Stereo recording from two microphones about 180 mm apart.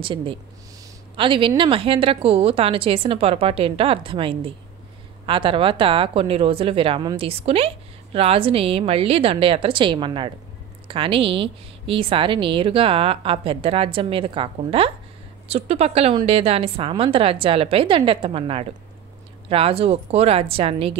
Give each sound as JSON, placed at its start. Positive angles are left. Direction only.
{"t": 0.0, "sound": "a woman's voice", "side_deg": -30}